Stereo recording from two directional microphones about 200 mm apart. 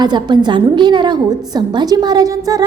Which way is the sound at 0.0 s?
20° right (ahead or behind).